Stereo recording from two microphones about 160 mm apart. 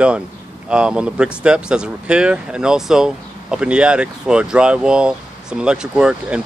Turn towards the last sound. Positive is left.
turn(degrees=-5)  # may be behind; listen again after turning